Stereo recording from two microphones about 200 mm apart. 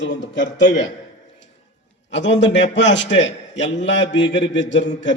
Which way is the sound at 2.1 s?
65° left (ahead or behind).